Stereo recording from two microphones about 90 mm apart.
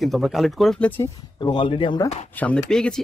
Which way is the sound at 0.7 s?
20° left (ahead or behind).